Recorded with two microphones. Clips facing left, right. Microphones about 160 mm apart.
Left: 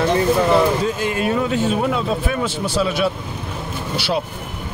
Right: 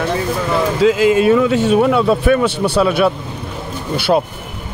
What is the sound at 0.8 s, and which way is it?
Speech, 90° right.